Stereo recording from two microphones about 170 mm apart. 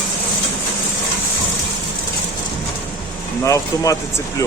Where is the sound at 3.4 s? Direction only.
20° left (ahead or behind).